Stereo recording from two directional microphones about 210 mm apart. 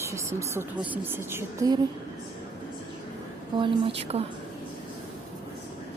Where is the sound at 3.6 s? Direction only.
25° right (ahead or behind).